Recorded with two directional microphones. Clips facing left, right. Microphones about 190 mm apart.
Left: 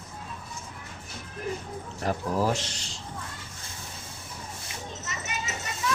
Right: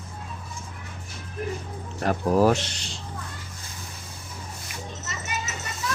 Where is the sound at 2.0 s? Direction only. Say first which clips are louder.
Right 7 dB; 65° right (ahead or behind).